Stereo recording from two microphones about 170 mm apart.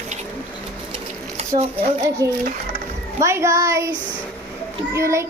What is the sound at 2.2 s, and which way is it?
Child singing, 20° right (ahead or behind).